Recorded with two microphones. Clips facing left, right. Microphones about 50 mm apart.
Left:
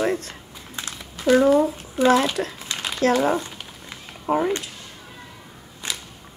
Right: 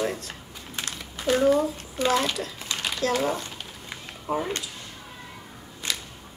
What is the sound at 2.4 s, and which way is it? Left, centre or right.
Speech, left.